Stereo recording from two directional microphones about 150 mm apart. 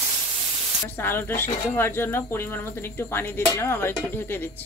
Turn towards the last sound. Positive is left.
turn(degrees=15)  # may be behind; listen again after turning